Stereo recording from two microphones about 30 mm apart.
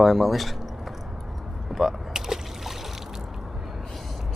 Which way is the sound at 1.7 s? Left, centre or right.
Centre.